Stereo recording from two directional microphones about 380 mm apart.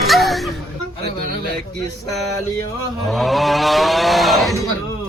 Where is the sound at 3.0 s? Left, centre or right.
Centre.